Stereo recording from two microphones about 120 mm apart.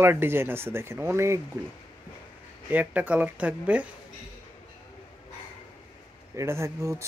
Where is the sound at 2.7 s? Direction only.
15° right (ahead or behind).